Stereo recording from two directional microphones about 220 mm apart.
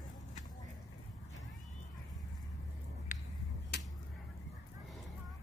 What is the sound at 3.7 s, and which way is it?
Finger snapping, 50° left (ahead or behind).